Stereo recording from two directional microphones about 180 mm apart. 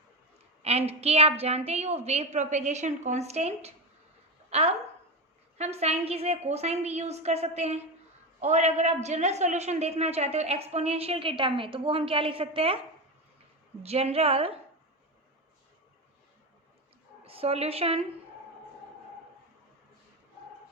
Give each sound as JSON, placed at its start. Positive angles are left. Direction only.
{"t": 0.6, "sound": "a woman's voice", "side_deg": -35}
{"t": 4.4, "sound": "a sound", "side_deg": -35}
{"t": 5.5, "sound": "a woman's voice", "side_deg": -35}
{"t": 13.8, "sound": "a woman's voice", "side_deg": -35}
{"t": 17.2, "sound": "a woman's voice", "side_deg": -35}